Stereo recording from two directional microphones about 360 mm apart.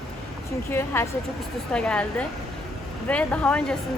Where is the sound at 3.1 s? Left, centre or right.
Centre.